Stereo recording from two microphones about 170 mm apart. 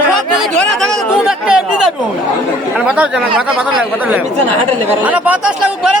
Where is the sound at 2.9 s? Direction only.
5° right (ahead or behind).